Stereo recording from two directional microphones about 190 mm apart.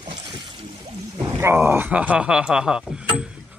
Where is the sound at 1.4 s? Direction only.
10° right (ahead or behind).